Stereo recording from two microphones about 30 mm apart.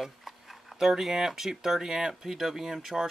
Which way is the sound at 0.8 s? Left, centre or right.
Centre.